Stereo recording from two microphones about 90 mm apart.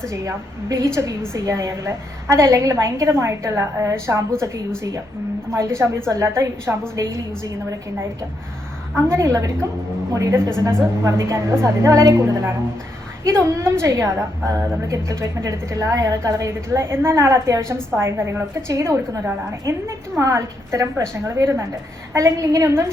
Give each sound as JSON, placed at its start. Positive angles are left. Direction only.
{"t": 0.1, "sound": "a woman's voice", "side_deg": -30}
{"t": 9.0, "sound": "a woman's voice", "side_deg": -30}